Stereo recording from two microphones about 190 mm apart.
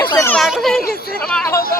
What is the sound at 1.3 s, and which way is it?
Speech, 15° left (ahead or behind).